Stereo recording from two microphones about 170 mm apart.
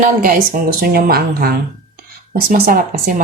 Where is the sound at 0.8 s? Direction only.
60° right (ahead or behind).